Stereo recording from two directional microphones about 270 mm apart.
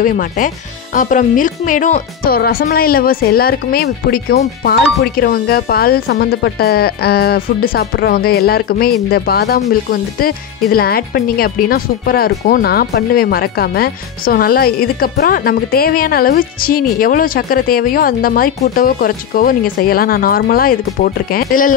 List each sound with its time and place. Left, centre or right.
0.0 s speech: left